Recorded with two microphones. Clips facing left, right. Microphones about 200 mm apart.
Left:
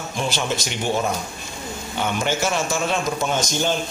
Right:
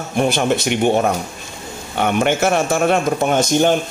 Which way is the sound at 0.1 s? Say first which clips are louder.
Right 9 dB; 60° right (ahead or behind).